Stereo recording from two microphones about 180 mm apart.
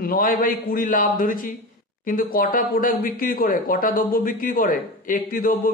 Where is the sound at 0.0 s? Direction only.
50° left (ahead or behind).